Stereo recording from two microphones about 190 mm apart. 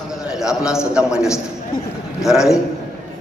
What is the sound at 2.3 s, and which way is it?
Speech, centre (ahead or behind).